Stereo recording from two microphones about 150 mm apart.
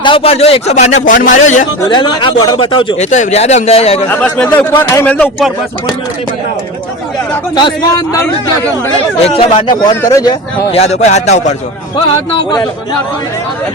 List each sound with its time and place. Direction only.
0.0 s speech: 35° left (ahead or behind); by 1.6 s 55° left (ahead or behind)
1.9 s a man's voice: 30° left (ahead or behind)
3.0 s speech: 50° left (ahead or behind)
4.1 s speech: 5° left (ahead or behind)
7.5 s speech: 25° left (ahead or behind)
9.0 s speech: 35° left (ahead or behind)
10.7 s speech: 45° left (ahead or behind)
12.3 s speech: 30° left (ahead or behind)